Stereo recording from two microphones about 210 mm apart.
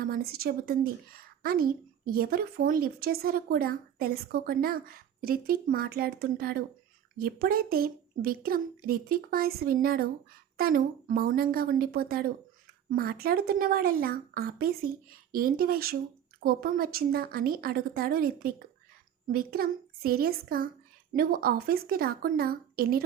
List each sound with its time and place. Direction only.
0.0 s a child's voice: 45° right (ahead or behind)
19.3 s a child's voice: 45° right (ahead or behind)